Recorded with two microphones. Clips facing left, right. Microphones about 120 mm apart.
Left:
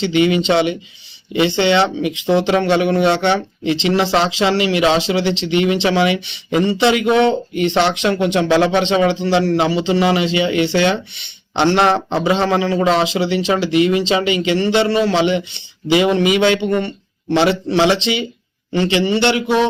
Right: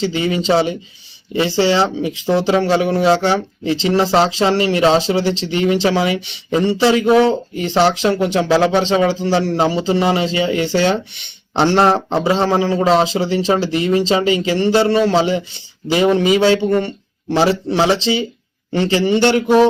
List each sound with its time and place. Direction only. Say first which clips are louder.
0.0 s a man's voice: left 3 dB; 35° right (ahead or behind)